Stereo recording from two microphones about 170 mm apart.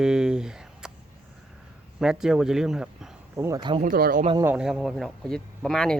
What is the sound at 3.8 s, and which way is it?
Speech, 60° right (ahead or behind).